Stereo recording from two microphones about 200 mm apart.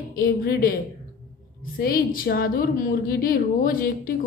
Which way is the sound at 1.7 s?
45° left (ahead or behind).